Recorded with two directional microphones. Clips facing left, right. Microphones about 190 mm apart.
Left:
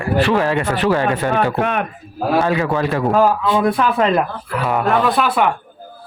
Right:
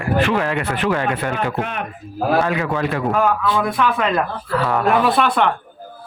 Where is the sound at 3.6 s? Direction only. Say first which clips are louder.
Left 3 dB; 30° left (ahead or behind); by 4.8 s 15° left (ahead or behind).